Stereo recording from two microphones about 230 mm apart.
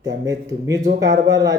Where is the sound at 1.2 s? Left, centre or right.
Centre.